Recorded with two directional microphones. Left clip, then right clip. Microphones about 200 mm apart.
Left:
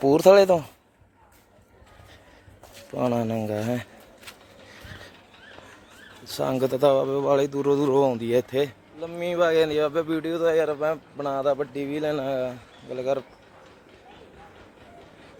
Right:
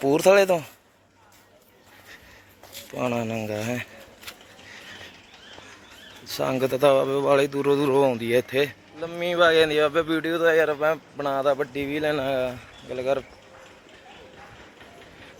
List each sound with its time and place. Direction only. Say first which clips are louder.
0.0 s speech: left 2 dB; 25° left (ahead or behind)
2.9 s speech: left 2 dB; 20° left (ahead or behind)
6.2 s speech: even; 15° left (ahead or behind); by 13.2 s centre (ahead or behind)